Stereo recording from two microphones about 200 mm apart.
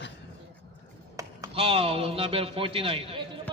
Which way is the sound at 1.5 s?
30° right (ahead or behind).